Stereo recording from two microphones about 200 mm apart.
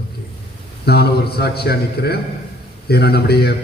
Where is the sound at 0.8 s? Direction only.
55° left (ahead or behind).